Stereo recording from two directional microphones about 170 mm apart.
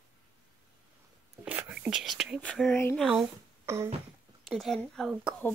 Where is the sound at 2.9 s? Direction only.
Centre (ahead or behind).